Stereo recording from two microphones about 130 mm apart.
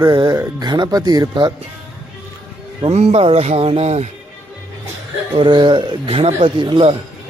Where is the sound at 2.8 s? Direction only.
50° right (ahead or behind).